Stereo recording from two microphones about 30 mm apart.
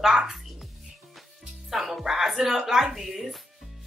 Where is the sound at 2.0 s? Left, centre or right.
Centre.